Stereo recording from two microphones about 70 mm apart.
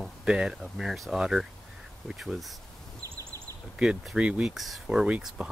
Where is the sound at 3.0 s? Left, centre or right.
Right.